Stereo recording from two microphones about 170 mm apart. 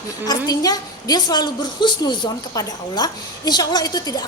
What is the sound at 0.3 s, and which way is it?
A woman's voice, 20° left (ahead or behind).